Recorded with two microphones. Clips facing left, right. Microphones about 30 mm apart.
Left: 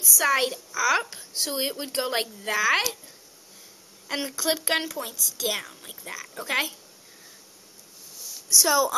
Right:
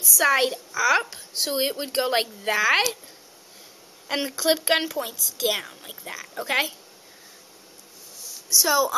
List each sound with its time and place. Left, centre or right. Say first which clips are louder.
0.0 s a woman's voice: right 2 dB; centre
0.3 s speech: right 2 dB; centre
4.1 s speech: right 4 dB; centre
8.2 s a sound: even; centre